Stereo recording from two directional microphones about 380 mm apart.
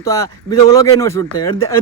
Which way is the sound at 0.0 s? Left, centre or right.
Centre.